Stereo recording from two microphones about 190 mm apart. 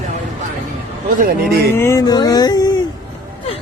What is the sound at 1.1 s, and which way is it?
Speech, 50° right (ahead or behind).